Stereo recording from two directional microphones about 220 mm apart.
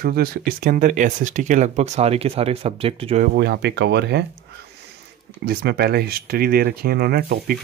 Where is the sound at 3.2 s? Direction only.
50° right (ahead or behind).